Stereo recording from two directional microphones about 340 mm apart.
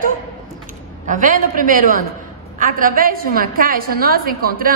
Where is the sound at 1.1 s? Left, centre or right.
Right.